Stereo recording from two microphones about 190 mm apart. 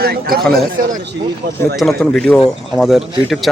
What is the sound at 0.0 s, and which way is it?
Chatter, 55° right (ahead or behind).